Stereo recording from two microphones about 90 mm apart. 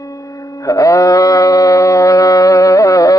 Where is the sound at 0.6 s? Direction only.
40° left (ahead or behind).